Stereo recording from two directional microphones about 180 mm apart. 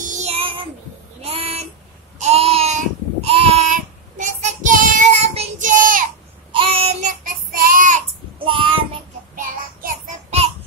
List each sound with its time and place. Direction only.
0.0 s child singing: 40° right (ahead or behind)
1.2 s a sound: 35° right (ahead or behind)
3.6 s child singing: 45° right (ahead or behind)
6.5 s child singing: 30° right (ahead or behind); by 8.0 s 50° right (ahead or behind)
8.5 s child singing: 30° right (ahead or behind)
9.3 s child singing: 50° right (ahead or behind)